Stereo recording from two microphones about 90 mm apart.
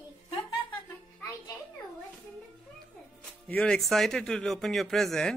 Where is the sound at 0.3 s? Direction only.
70° left (ahead or behind).